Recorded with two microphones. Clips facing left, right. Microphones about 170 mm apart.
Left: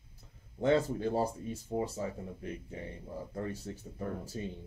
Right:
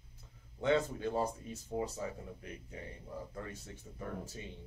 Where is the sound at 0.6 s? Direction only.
35° left (ahead or behind).